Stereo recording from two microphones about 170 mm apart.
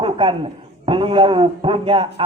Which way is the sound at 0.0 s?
30° right (ahead or behind).